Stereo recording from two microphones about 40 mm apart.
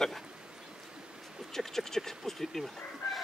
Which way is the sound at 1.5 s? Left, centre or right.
Centre.